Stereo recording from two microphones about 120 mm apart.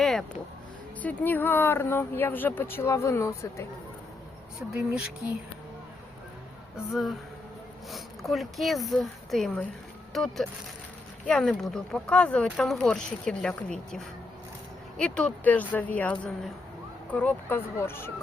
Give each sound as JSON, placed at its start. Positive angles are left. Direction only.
{"t": 0.0, "sound": "vehicle", "side_deg": 5}
{"t": 1.0, "sound": "speech", "side_deg": 15}
{"t": 4.8, "sound": "speech", "side_deg": -5}
{"t": 6.7, "sound": "speech", "side_deg": 0}